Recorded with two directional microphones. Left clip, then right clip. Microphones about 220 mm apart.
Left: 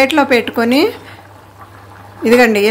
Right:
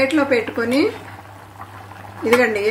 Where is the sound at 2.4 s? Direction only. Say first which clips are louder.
Left 7 dB; 50° left (ahead or behind).